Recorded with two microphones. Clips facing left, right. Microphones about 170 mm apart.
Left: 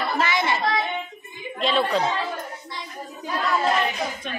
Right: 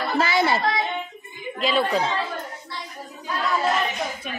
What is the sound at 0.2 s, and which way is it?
Speech, 35° right (ahead or behind).